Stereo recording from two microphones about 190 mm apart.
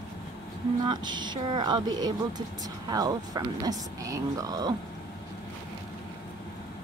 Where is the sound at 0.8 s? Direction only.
25° right (ahead or behind).